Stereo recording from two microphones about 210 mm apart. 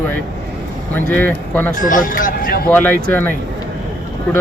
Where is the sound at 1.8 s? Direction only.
40° left (ahead or behind).